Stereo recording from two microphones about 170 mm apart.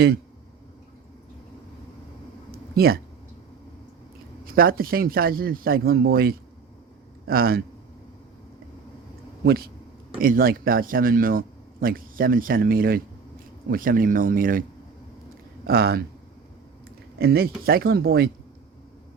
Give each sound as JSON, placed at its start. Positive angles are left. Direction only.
{"t": 2.5, "sound": "a sound", "side_deg": -65}
{"t": 4.4, "sound": "speech", "side_deg": -60}
{"t": 9.4, "sound": "speech", "side_deg": -65}
{"t": 15.6, "sound": "speech", "side_deg": -65}
{"t": 17.2, "sound": "speech", "side_deg": -70}